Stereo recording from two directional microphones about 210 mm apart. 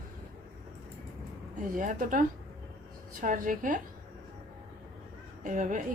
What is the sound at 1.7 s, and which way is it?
A woman's voice, 40° right (ahead or behind).